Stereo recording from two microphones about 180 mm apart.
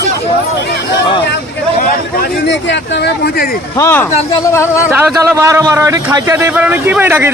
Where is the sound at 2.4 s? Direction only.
70° left (ahead or behind).